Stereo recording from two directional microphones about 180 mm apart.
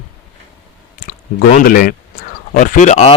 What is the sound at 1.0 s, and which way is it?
Speech, 55° left (ahead or behind).